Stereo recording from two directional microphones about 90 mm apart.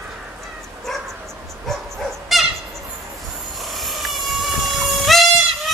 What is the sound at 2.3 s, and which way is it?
Owl, centre (ahead or behind).